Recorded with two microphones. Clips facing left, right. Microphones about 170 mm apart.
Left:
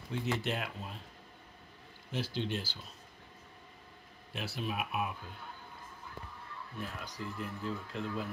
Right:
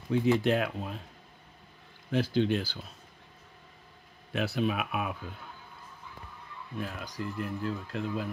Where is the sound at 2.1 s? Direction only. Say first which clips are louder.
Right 9 dB; 50° right (ahead or behind).